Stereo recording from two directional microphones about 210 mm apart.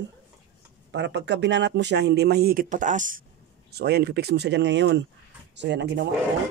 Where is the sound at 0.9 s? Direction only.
55° right (ahead or behind); by 3.3 s 40° right (ahead or behind).